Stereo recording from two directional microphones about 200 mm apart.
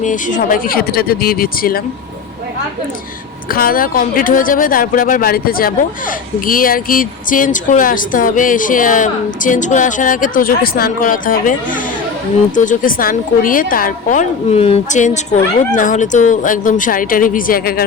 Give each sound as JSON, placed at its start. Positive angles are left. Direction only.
{"t": 0.0, "sound": "speech", "side_deg": 40}
{"t": 3.5, "sound": "a woman's voice", "side_deg": 45}